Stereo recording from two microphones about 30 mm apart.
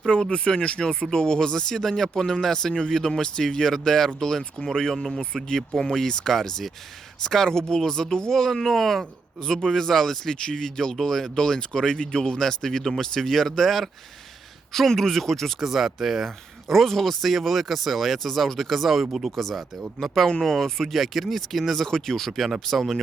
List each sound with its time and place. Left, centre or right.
0.3 s speech: left
4.9 s speech: centre
5.5 s speech: centre
9.4 s speech: left
10.3 s speech: left
11.3 s speech: left
12.4 s speech: centre
13.7 s speech: centre
15.6 s speech: centre
18.3 s speech: centre
20.9 s speech: centre
21.8 s speech: centre
22.3 s speech: centre